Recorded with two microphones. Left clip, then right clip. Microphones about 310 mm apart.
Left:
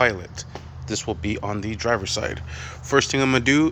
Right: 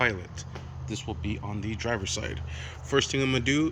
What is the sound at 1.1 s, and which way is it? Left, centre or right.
Speech, left.